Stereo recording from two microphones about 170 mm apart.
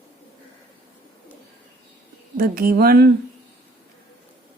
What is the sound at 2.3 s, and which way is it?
Speech, 60° right (ahead or behind).